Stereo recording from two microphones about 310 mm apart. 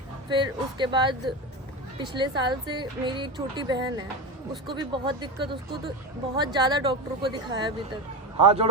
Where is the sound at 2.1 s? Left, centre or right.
Centre.